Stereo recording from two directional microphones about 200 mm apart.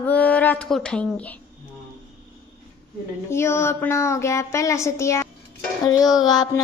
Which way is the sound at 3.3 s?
15° left (ahead or behind).